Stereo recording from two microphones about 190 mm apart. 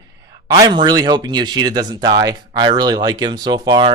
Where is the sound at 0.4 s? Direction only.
20° right (ahead or behind).